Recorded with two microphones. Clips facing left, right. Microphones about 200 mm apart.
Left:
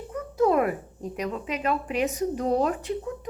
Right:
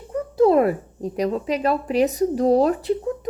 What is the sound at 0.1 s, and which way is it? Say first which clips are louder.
Speech: right 6 dB; 30° right (ahead or behind).